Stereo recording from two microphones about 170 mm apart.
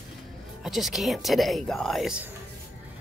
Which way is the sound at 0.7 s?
Centre (ahead or behind).